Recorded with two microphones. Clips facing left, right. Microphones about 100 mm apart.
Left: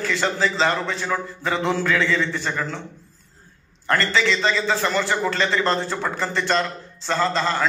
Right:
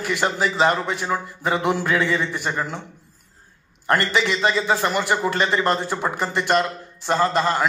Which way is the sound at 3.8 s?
20° right (ahead or behind).